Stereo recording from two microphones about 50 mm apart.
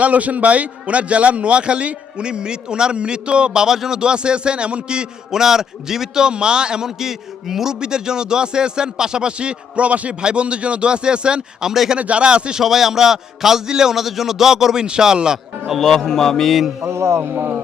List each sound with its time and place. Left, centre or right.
0.0 s a man's voice: right
12.6 s a man's voice: centre
15.8 s music: centre
16.8 s speech: right